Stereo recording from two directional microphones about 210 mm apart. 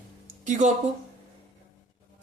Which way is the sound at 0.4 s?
35° right (ahead or behind).